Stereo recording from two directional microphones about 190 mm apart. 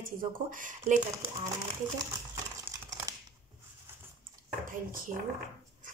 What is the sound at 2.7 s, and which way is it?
Crumpling, 15° right (ahead or behind).